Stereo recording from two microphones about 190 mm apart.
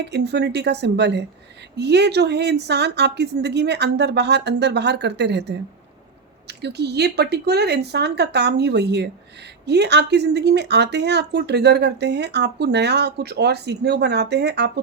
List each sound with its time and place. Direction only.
0.0 s speech: 65° right (ahead or behind)